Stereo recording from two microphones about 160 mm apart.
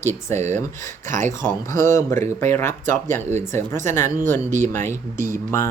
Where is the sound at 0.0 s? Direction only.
15° left (ahead or behind).